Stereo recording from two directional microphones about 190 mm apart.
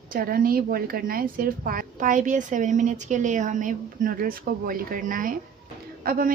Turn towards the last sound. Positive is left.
turn(degrees=-50)  # may be behind; listen again after turning